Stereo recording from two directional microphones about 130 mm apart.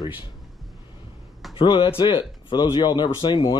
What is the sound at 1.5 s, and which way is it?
Speech, 40° left (ahead or behind).